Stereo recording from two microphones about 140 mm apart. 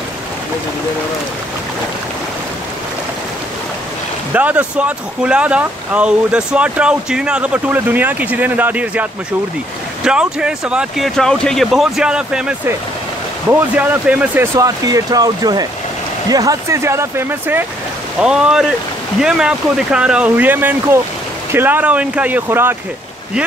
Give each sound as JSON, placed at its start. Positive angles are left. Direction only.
{"t": 4.3, "sound": "speech", "side_deg": -10}
{"t": 10.0, "sound": "speech", "side_deg": -5}